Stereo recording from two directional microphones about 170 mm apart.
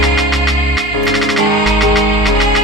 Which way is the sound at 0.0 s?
Centre (ahead or behind).